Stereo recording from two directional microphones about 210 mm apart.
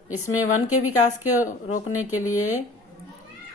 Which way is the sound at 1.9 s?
90° left.